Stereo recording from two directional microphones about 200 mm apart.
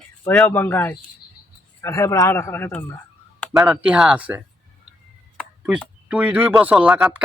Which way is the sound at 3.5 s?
5° right (ahead or behind).